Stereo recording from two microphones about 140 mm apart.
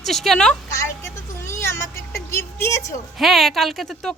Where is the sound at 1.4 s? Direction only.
20° left (ahead or behind).